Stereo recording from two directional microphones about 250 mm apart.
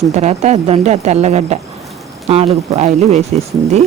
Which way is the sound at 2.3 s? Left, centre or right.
Right.